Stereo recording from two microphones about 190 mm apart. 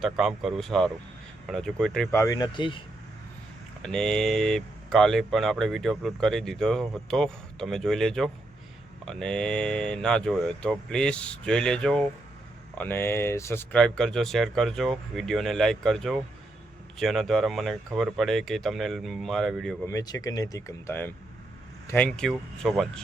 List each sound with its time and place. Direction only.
0.0 s speech: centre (ahead or behind)
2.0 s speech: 15° left (ahead or behind)
3.8 s speech: 5° left (ahead or behind)
19.8 s speech: 20° left (ahead or behind); by 22.9 s centre (ahead or behind)